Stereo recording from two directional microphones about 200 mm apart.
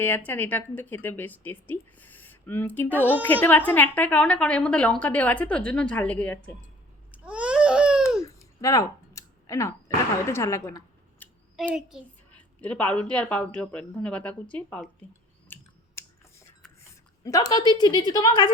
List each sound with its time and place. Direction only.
0.3 s a woman's voice: 10° left (ahead or behind)
7.1 s babbling: 5° right (ahead or behind)
8.2 s a sound: 15° left (ahead or behind)
10.2 s speech: 15° left (ahead or behind)
11.5 s a woman's voice: 5° right (ahead or behind)
15.5 s clicking: 10° left (ahead or behind)
16.0 s a sound: 15° left (ahead or behind)
17.2 s a woman's voice: 15° left (ahead or behind)